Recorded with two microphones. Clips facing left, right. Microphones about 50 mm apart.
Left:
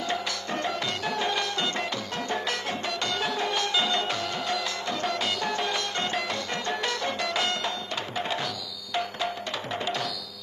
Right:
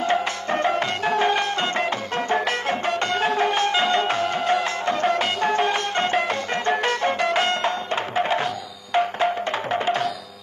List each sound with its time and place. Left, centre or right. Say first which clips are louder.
0.0 s music: right 8 dB; right